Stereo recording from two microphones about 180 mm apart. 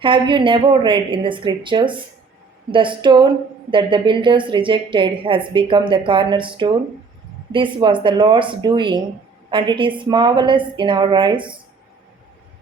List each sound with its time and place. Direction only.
0.0 s a woman's voice: 25° right (ahead or behind)